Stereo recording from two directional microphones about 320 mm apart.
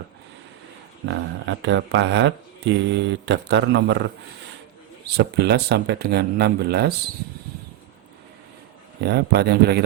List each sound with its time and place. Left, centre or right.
1.0 s speech: right
5.1 s speech: right
9.0 s speech: right